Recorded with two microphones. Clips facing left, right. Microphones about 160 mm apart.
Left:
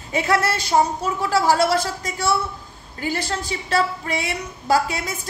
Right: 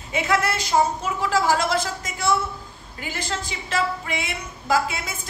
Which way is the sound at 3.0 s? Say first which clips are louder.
Left 5 dB; 40° left (ahead or behind).